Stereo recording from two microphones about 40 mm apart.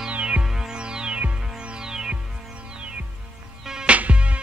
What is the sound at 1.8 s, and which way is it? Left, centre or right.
Music, centre.